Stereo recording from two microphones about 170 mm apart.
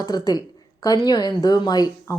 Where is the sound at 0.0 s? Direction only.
20° left (ahead or behind).